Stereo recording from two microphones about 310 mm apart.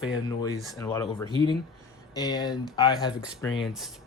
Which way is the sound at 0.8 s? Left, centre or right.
Centre.